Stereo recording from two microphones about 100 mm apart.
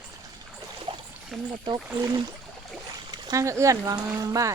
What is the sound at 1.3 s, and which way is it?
Speech, centre (ahead or behind).